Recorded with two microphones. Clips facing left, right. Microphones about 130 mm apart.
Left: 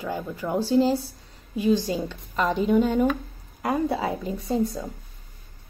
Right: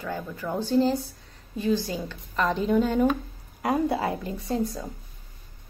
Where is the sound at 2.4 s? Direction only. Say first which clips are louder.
Left 2 dB; 5° left (ahead or behind).